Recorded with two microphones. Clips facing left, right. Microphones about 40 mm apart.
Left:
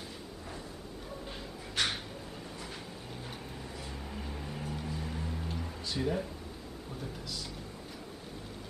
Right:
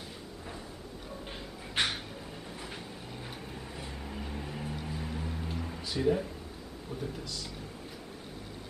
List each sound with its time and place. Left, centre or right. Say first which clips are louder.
1.8 s a sound: right 2 dB; right
4.1 s vehicle: right 3 dB; centre
4.6 s music: right 1 dB; centre
7.0 s speech: right 3 dB; centre